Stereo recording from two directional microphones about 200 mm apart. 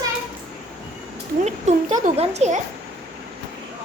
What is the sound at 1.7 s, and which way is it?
Speech, 35° right (ahead or behind).